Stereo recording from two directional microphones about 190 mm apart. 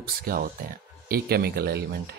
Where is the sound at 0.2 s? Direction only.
50° right (ahead or behind).